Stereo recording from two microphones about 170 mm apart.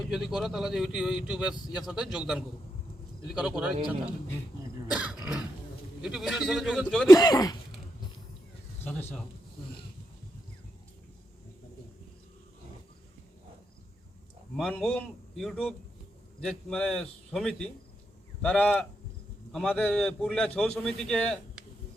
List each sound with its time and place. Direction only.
0.1 s a man's voice: centre (ahead or behind)
4.9 s throat clearing: 5° right (ahead or behind)
6.0 s a man's voice: 5° right (ahead or behind)
7.1 s speech: 20° left (ahead or behind)
8.8 s speech: 10° left (ahead or behind)
14.5 s a man's voice: 5° left (ahead or behind)